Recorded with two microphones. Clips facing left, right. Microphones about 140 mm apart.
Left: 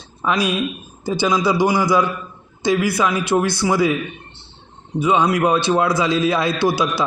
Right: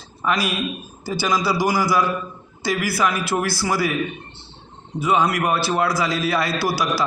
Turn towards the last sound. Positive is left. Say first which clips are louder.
# left 3 dB
turn(degrees=20)  # may be behind; listen again after turning